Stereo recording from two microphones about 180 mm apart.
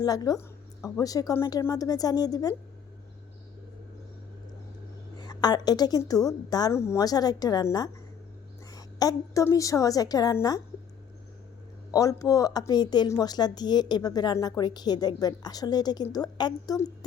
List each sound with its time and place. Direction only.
0.0 s speech: 20° left (ahead or behind)
5.1 s a woman's voice: 25° left (ahead or behind)
11.9 s speech: 20° left (ahead or behind)